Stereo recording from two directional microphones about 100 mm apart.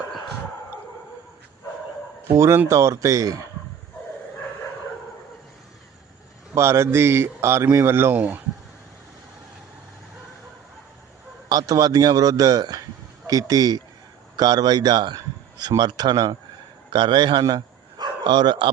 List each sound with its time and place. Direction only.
0.1 s a sound: centre (ahead or behind)
2.3 s a man's voice: 25° right (ahead or behind)
6.5 s a man's voice: 30° right (ahead or behind)
11.4 s a man's voice: 40° right (ahead or behind)
17.4 s livestock: 45° right (ahead or behind)